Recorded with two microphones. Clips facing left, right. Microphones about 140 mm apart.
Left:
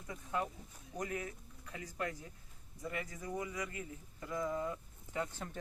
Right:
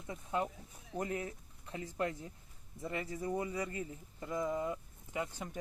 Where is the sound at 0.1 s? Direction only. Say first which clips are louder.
Right 2 dB; 25° right (ahead or behind).